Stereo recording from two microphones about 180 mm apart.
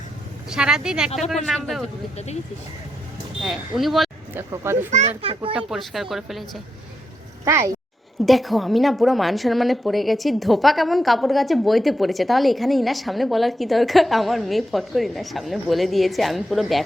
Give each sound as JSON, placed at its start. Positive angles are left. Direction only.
{"t": 0.5, "sound": "a woman's voice", "side_deg": -5}
{"t": 2.1, "sound": "speech", "side_deg": 35}
{"t": 3.4, "sound": "a woman's voice", "side_deg": 0}
{"t": 4.4, "sound": "speech", "side_deg": -15}
{"t": 4.9, "sound": "a child's voice", "side_deg": -40}
{"t": 5.5, "sound": "a woman's voice", "side_deg": 0}
{"t": 7.4, "sound": "speech", "side_deg": -15}
{"t": 8.2, "sound": "a woman's voice", "side_deg": 0}